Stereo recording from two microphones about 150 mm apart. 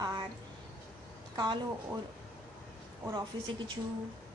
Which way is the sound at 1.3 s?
25° right (ahead or behind).